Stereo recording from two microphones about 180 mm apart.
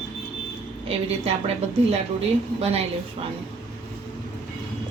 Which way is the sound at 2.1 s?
35° right (ahead or behind).